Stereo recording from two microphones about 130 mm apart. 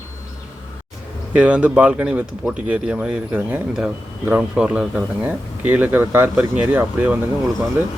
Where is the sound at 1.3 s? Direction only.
10° right (ahead or behind).